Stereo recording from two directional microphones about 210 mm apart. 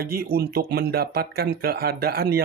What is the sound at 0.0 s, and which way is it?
Speech, 45° right (ahead or behind).